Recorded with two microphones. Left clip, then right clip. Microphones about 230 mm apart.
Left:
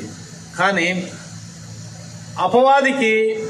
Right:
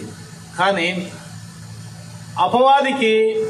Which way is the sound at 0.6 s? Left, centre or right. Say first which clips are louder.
Even; right.